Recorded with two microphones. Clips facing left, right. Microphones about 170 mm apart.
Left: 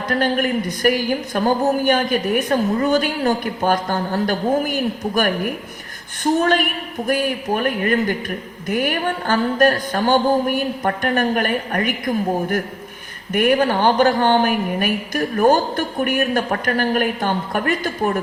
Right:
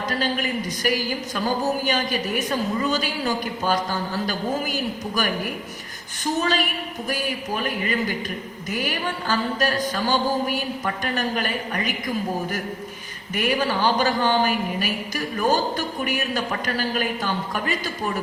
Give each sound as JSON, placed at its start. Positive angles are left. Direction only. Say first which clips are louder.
{"t": 0.1, "sound": "a man's voice", "louder": "left 8 dB", "side_deg": 55}